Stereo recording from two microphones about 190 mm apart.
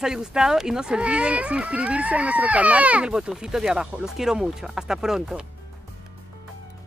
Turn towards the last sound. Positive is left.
turn(degrees=-5)  # may be behind; listen again after turning